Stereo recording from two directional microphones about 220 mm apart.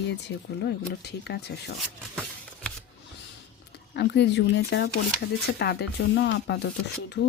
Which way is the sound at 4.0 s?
50° left (ahead or behind).